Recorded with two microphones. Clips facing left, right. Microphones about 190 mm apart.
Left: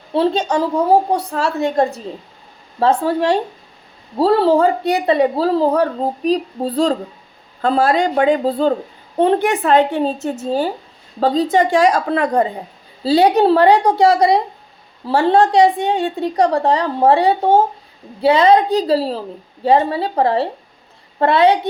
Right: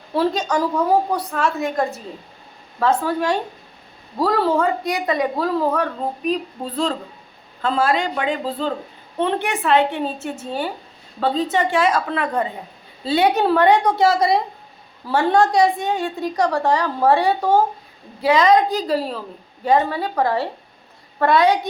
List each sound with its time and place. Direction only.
0.1 s a woman's voice: 25° left (ahead or behind)